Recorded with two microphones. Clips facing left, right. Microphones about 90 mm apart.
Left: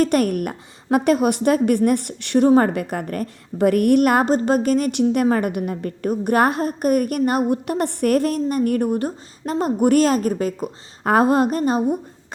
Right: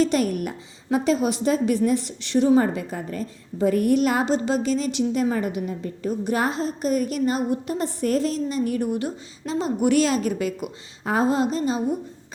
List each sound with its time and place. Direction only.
0.0 s a woman's voice: 55° left (ahead or behind)
11.0 s a woman's voice: 60° left (ahead or behind)